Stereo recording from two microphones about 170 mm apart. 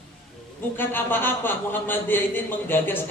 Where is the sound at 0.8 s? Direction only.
10° left (ahead or behind).